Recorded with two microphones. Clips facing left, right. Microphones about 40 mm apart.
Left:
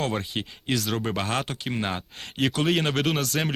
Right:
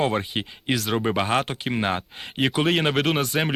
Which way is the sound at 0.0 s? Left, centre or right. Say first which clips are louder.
Right 4 dB; centre.